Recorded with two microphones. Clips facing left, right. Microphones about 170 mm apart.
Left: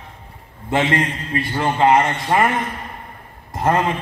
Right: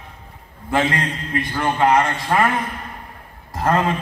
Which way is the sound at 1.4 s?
25° left (ahead or behind).